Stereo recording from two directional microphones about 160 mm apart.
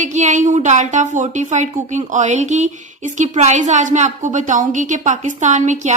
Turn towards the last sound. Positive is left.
turn(degrees=-50)  # may be behind; listen again after turning